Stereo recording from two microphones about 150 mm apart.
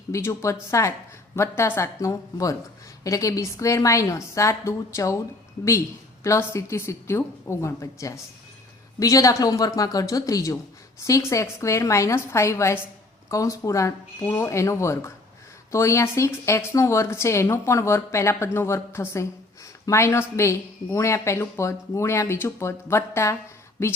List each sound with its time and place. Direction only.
0.1 s speech: 20° left (ahead or behind)
6.2 s speech: 20° left (ahead or behind)